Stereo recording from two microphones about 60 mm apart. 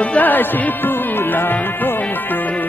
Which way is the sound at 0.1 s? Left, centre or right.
Left.